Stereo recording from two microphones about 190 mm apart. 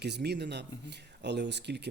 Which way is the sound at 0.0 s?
60° right (ahead or behind).